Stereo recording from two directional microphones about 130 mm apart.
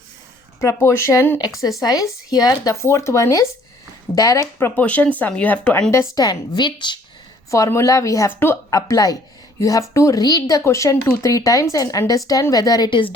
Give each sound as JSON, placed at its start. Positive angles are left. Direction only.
{"t": 0.6, "sound": "speech", "side_deg": 20}
{"t": 1.4, "sound": "speech", "side_deg": 30}
{"t": 5.9, "sound": "speech", "side_deg": 20}
{"t": 6.2, "sound": "a woman's voice", "side_deg": 35}
{"t": 7.5, "sound": "speech", "side_deg": 25}